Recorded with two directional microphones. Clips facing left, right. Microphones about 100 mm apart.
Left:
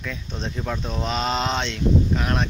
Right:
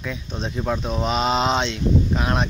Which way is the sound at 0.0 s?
15° right (ahead or behind).